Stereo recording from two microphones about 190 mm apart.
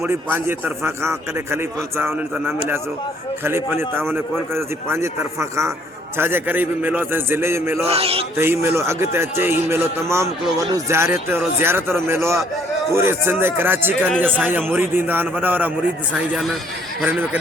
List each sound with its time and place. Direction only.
0.0 s a man's voice: 10° right (ahead or behind)
7.9 s a man's voice: 30° right (ahead or behind)
8.4 s a man's voice: 15° right (ahead or behind)